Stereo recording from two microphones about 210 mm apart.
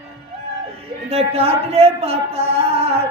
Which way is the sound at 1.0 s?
30° right (ahead or behind).